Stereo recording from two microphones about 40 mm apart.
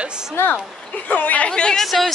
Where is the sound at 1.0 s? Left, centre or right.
Left.